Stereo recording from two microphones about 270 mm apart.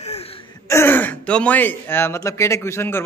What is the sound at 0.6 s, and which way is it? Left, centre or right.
Speech, centre.